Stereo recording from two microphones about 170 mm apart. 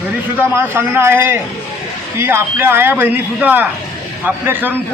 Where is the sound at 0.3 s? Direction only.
10° right (ahead or behind).